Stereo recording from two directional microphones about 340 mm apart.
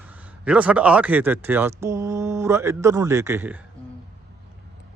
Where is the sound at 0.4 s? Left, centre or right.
Centre.